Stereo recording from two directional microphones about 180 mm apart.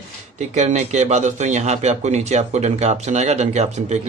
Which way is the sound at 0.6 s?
40° right (ahead or behind).